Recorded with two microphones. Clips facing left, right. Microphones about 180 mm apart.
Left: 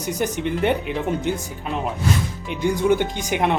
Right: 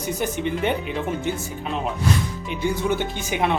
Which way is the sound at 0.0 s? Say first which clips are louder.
Left 1 dB; 15° left (ahead or behind).